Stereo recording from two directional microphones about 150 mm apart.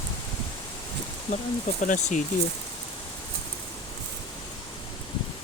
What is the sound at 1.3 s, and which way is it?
Speech, 55° left (ahead or behind).